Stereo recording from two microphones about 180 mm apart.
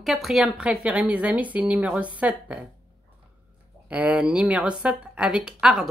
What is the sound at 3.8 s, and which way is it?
Speech, 5° right (ahead or behind).